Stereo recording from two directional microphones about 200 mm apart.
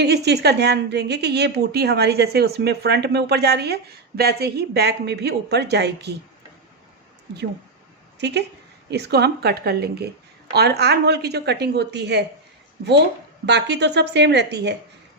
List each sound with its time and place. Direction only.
0.0 s a woman's voice: 55° right (ahead or behind)
8.2 s a woman's voice: 60° right (ahead or behind)
13.4 s a woman's voice: 60° right (ahead or behind)